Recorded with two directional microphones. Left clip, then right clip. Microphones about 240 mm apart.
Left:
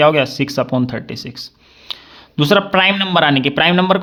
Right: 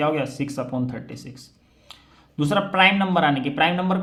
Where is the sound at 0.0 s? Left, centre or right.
Left.